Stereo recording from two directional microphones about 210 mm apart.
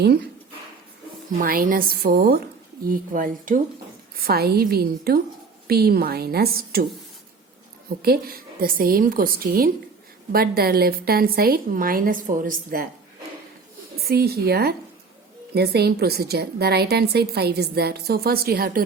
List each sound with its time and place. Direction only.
1.4 s a woman's voice: 40° right (ahead or behind)
8.0 s a woman's voice: 45° right (ahead or behind)
14.0 s a woman's voice: 50° right (ahead or behind)